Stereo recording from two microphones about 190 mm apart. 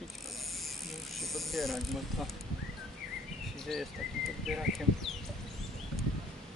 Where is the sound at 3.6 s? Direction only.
Centre (ahead or behind).